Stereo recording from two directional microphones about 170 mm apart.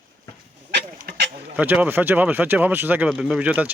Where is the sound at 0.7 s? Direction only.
85° right.